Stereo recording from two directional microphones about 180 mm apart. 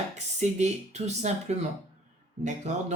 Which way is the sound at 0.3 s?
40° right (ahead or behind).